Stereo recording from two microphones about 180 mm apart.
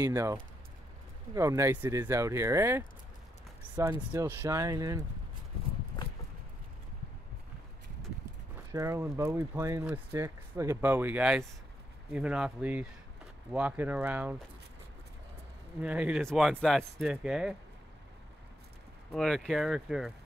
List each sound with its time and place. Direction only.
0.0 s speech: 15° right (ahead or behind)
4.1 s speech: 15° right (ahead or behind)
5.9 s a sound: 25° left (ahead or behind)
8.7 s speech: 15° right (ahead or behind)
15.8 s speech: 5° right (ahead or behind)
19.1 s speech: centre (ahead or behind)